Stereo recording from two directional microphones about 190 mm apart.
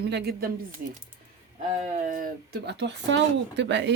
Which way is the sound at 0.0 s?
60° right (ahead or behind).